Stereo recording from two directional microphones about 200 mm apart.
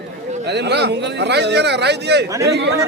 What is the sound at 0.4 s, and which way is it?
A man's voice, 60° right (ahead or behind).